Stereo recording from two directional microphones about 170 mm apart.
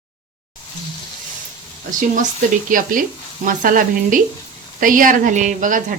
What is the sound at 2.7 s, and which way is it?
Speech, 50° right (ahead or behind).